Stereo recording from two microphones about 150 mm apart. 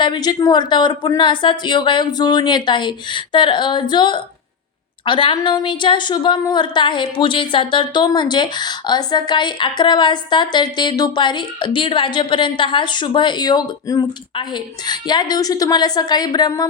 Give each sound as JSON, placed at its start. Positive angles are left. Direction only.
{"t": 0.0, "sound": "a woman's voice", "side_deg": 30}